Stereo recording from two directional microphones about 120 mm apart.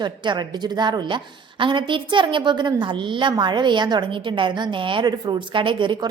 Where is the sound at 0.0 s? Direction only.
40° right (ahead or behind).